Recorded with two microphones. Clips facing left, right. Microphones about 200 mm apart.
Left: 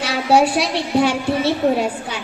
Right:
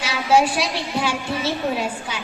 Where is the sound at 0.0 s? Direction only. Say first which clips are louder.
Left 3 dB; 60° left (ahead or behind).